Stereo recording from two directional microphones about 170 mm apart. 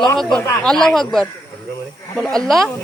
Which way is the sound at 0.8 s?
Centre (ahead or behind).